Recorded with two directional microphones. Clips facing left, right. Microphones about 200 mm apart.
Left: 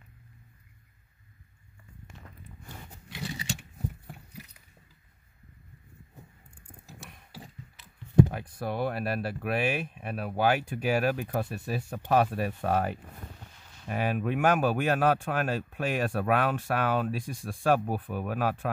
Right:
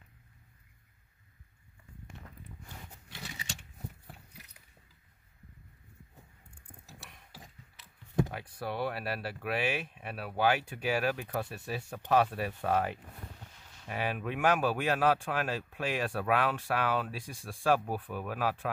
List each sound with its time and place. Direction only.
8.3 s speech: 45° left (ahead or behind)